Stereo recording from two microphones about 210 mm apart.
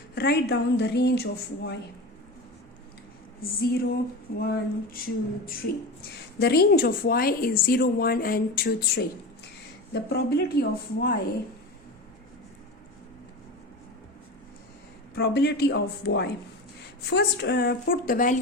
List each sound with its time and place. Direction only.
0.1 s a woman's voice: 50° left (ahead or behind)
3.6 s a woman's voice: 45° left (ahead or behind)
15.1 s a woman's voice: 50° left (ahead or behind)